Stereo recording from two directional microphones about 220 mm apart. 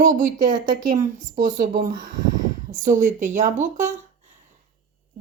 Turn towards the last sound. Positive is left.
turn(degrees=-35)  # may be behind; listen again after turning